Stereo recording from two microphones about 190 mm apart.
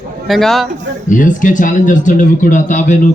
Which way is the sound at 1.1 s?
45° left (ahead or behind).